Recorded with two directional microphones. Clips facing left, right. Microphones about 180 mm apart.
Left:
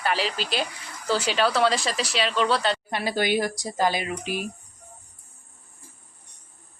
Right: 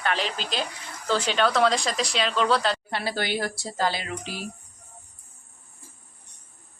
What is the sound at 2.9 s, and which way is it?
A woman's voice, 15° left (ahead or behind).